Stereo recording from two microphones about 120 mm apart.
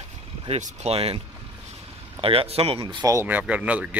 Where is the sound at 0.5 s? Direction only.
60° right (ahead or behind).